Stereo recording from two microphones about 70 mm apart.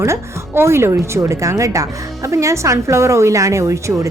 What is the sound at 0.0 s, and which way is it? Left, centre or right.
A woman's voice, right.